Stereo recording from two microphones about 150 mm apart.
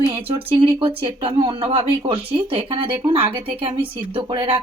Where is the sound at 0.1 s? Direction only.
35° right (ahead or behind).